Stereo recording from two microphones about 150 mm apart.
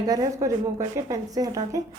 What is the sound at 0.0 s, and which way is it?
A woman's voice, 25° right (ahead or behind).